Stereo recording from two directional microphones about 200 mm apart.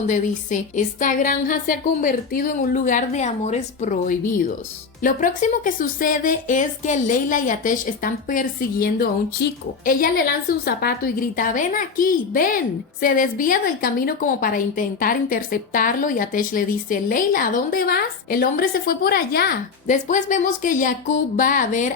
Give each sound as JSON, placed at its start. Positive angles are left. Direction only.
{"t": 0.1, "sound": "a woman's voice", "side_deg": 40}